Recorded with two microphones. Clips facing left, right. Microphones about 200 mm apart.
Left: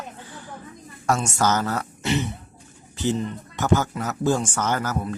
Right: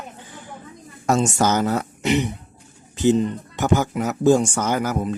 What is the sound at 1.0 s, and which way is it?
Speech, 20° right (ahead or behind).